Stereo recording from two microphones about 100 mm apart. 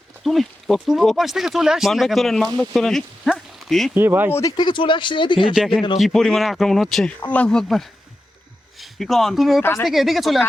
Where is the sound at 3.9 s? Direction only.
20° right (ahead or behind).